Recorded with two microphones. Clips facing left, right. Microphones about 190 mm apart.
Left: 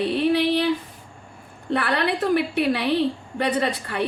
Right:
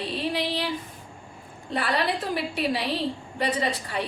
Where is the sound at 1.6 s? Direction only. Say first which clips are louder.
Left 3 dB; 60° left (ahead or behind).